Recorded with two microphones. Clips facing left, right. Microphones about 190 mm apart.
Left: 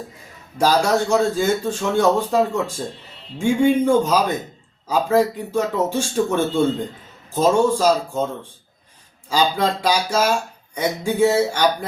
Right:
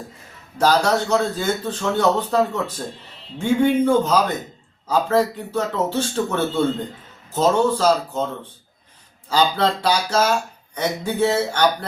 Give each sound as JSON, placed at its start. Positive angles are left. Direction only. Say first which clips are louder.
{"t": 0.6, "sound": "speech", "louder": "left 1 dB", "side_deg": 10}
{"t": 9.3, "sound": "speech", "louder": "even", "side_deg": 10}